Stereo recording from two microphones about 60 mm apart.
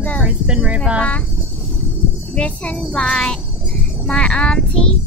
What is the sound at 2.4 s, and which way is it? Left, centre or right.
A child's voice, centre.